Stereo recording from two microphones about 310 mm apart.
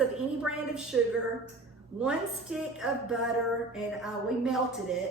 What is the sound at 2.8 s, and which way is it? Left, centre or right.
Speech, centre.